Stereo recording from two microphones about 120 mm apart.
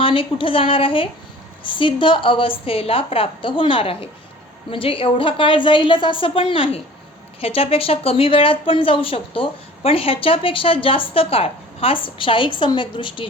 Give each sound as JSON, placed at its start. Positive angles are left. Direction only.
{"t": 0.0, "sound": "a woman's voice", "side_deg": 45}